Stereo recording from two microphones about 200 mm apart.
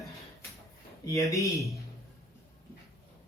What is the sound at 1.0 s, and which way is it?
Speech, 15° left (ahead or behind).